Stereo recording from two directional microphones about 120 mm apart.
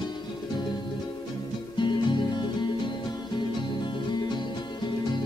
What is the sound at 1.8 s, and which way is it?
Music, 40° left (ahead or behind).